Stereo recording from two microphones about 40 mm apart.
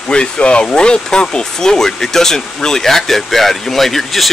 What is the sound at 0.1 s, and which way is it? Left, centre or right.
Speech, left.